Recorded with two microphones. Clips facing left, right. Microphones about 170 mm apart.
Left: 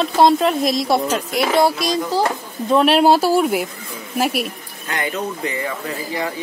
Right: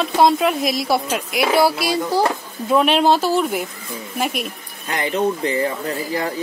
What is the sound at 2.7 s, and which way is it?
Speech, centre (ahead or behind).